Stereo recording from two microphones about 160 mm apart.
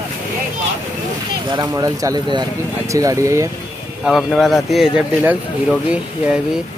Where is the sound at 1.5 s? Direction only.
25° right (ahead or behind).